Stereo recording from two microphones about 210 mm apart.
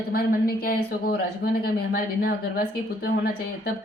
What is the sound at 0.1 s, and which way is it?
Speech, 45° left (ahead or behind).